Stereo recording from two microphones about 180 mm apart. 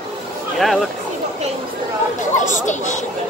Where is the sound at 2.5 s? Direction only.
40° left (ahead or behind).